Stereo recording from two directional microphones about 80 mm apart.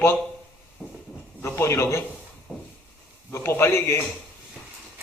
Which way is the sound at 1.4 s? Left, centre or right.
Left.